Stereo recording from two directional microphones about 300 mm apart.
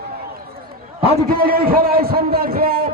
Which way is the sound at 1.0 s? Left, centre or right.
Right.